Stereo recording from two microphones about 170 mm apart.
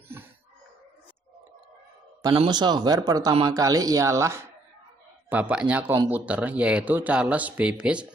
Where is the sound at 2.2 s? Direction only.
30° right (ahead or behind).